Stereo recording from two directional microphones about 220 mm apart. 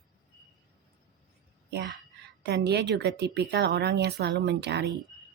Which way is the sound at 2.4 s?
50° right (ahead or behind).